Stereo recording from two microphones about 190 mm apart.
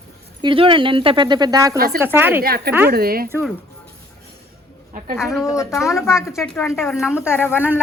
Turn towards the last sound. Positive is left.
turn(degrees=10)  # may be behind; listen again after turning